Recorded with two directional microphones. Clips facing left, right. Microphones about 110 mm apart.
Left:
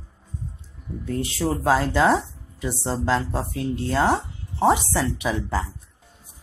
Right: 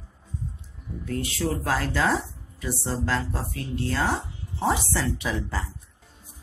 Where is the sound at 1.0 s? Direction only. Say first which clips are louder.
Left 3 dB; 30° left (ahead or behind).